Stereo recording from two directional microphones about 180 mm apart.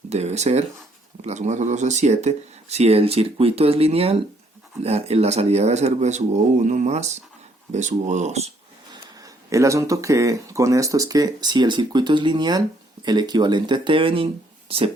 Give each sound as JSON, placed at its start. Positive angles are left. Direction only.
{"t": 0.1, "sound": "speech", "side_deg": -40}
{"t": 9.2, "sound": "speech", "side_deg": -15}